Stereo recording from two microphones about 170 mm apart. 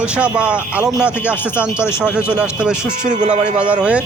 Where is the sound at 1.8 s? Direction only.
15° left (ahead or behind).